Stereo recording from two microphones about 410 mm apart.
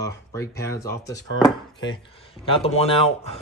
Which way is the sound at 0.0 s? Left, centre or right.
Centre.